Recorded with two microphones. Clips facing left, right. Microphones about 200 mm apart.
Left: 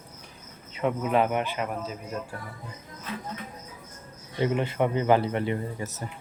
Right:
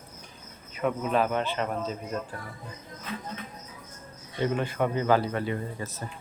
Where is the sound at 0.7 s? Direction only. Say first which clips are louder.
Left 2 dB; 20° left (ahead or behind).